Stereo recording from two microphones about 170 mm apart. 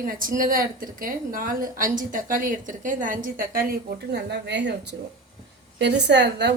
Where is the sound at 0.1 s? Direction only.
55° right (ahead or behind).